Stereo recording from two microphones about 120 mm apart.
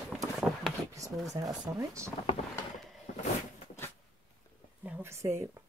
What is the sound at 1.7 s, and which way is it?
Speech, 25° right (ahead or behind).